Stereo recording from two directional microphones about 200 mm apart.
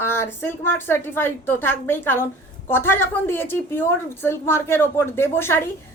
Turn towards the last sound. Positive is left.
turn(degrees=10)  # may be behind; listen again after turning